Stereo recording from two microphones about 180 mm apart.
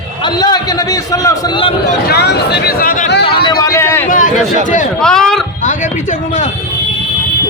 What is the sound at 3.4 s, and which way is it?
Speech, 20° left (ahead or behind).